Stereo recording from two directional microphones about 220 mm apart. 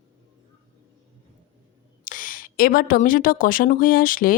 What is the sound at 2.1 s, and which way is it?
A woman's voice, 40° left (ahead or behind).